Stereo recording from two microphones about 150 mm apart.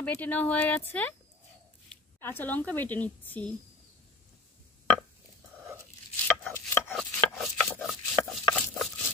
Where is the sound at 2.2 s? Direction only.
15° left (ahead or behind).